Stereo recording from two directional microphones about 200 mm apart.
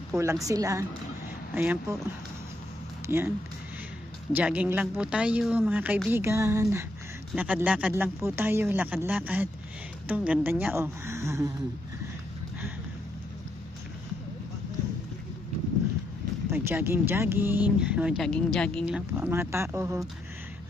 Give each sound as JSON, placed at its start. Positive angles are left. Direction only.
{"t": 0.1, "sound": "speech", "side_deg": -15}
{"t": 3.1, "sound": "speech", "side_deg": -10}
{"t": 16.5, "sound": "speech", "side_deg": -10}